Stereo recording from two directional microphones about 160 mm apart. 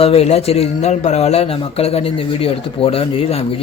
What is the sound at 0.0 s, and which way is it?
A man's voice, 40° left (ahead or behind).